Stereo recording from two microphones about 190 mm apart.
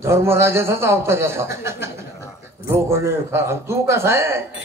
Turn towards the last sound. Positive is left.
turn(degrees=-15)  # may be behind; listen again after turning